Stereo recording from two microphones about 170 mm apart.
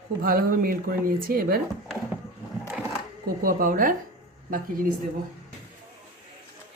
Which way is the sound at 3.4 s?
55° right (ahead or behind).